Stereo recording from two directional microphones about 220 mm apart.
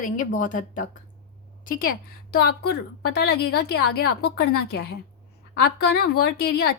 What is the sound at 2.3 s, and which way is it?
A woman's voice, 45° left (ahead or behind).